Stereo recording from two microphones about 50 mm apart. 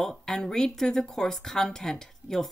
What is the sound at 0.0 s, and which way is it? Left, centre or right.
Speech, centre.